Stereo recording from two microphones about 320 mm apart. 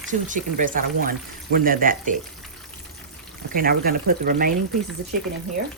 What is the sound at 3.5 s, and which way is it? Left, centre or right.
Speech, right.